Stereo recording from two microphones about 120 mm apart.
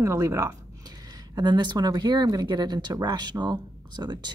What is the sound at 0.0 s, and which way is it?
Speech, 25° right (ahead or behind).